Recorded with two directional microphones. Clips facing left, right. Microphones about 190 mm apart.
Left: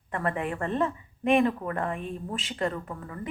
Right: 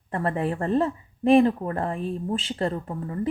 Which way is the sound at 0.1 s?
35° right (ahead or behind).